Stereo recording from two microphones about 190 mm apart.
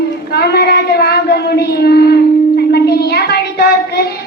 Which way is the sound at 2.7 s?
55° left (ahead or behind).